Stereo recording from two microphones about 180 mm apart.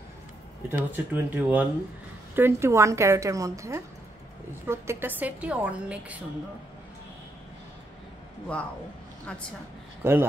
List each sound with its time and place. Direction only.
0.7 s a woman's voice: 10° right (ahead or behind)
10.0 s a woman's voice: 10° right (ahead or behind)